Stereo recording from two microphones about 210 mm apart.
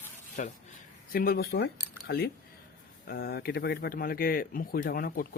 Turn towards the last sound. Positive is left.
turn(degrees=45)  # may be behind; listen again after turning